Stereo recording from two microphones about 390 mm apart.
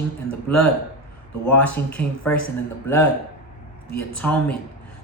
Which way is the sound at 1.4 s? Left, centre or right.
Centre.